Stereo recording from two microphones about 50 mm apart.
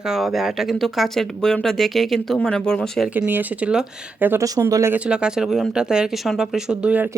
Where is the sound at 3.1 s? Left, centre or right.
Right.